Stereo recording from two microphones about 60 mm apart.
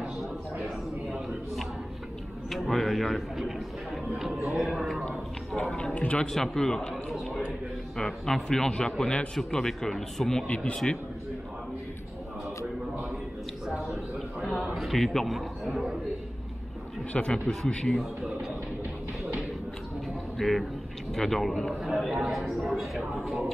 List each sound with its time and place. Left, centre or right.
0.0 s a sound: centre
2.5 s a man's voice: centre
5.1 s a sound: centre
5.9 s speech: centre
6.2 s speech: centre
7.1 s speech: centre
10.4 s speech: centre
13.7 s a sound: centre
14.7 s a man's voice: centre
17.1 s speech: centre
17.9 s speech: centre
20.3 s a man's voice: centre